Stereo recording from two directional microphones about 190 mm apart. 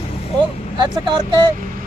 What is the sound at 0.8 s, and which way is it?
Speech, 25° right (ahead or behind).